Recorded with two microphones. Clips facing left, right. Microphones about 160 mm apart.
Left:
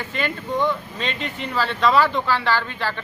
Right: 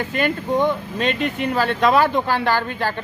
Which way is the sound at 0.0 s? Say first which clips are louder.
Right 5 dB; 50° right (ahead or behind).